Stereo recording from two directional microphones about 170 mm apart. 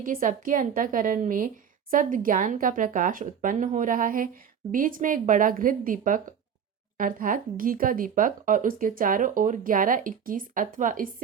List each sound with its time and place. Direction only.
0.0 s speech: 55° right (ahead or behind)